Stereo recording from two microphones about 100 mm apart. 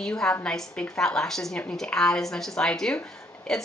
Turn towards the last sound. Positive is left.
turn(degrees=5)  # may be behind; listen again after turning